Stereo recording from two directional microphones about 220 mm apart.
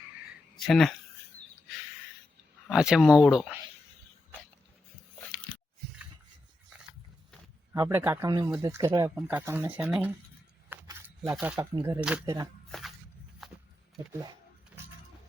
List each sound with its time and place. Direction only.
0.5 s speech: centre (ahead or behind)
2.6 s speech: 5° right (ahead or behind)
7.7 s speech: 15° right (ahead or behind)
10.7 s a sound: 10° right (ahead or behind)
11.3 s speech: 5° right (ahead or behind)
14.1 s speech: 15° right (ahead or behind)